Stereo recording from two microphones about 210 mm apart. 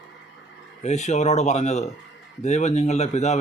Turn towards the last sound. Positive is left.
turn(degrees=30)  # may be behind; listen again after turning